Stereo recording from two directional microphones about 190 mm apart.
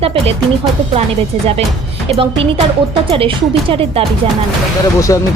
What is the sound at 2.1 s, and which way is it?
Speech, 30° right (ahead or behind).